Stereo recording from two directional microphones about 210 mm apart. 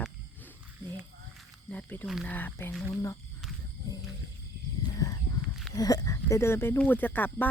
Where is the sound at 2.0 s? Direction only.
Centre (ahead or behind).